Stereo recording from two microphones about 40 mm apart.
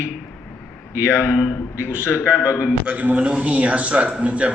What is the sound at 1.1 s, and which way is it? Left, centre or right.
Speech, left.